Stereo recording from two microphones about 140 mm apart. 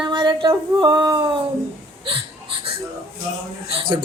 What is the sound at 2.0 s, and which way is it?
Wheeze, 40° right (ahead or behind).